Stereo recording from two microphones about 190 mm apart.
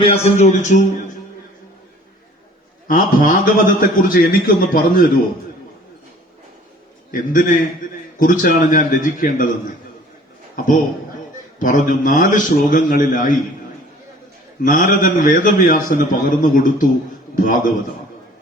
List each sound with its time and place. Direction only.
0.0 s speech: 35° left (ahead or behind)
2.8 s a man's voice: 45° left (ahead or behind)
7.1 s a man's voice: 45° left (ahead or behind)
10.5 s a man's voice: 45° left (ahead or behind)
14.6 s a man's voice: 45° left (ahead or behind)